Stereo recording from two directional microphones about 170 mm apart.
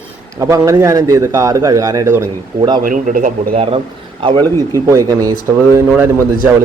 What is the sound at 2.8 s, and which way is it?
Speech, 55° right (ahead or behind).